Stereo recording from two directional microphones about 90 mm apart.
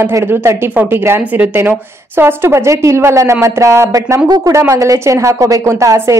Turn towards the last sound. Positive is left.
turn(degrees=-35)  # may be behind; listen again after turning